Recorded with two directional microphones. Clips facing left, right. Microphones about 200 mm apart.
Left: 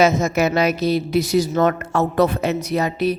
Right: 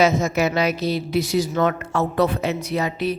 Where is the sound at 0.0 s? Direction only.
45° left (ahead or behind).